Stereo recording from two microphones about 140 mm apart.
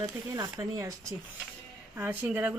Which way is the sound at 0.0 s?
25° right (ahead or behind).